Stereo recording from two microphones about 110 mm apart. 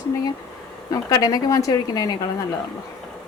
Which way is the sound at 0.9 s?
35° left (ahead or behind).